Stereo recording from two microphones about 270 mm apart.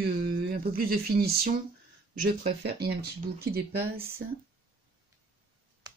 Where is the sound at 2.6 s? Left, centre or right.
Right.